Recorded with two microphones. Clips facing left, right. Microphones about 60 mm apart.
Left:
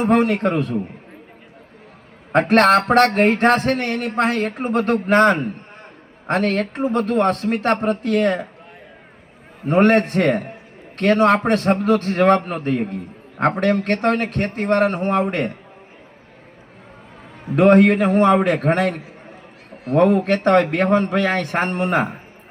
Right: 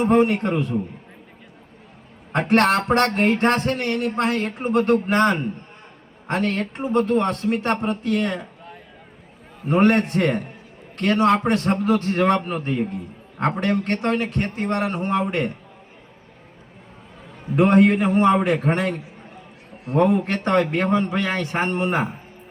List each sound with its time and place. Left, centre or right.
0.0 s a man's voice: left
2.3 s a man's voice: left
9.6 s a man's voice: left
17.5 s a man's voice: left